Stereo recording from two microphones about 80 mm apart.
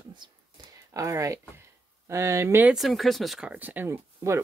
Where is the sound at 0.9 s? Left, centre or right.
Right.